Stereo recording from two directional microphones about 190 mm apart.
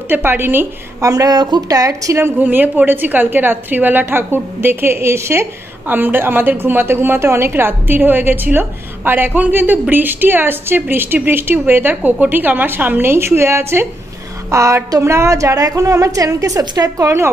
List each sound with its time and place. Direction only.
0.1 s a woman's voice: 10° right (ahead or behind)